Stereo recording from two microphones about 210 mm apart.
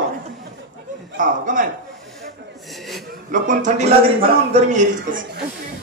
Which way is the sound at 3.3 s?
35° right (ahead or behind).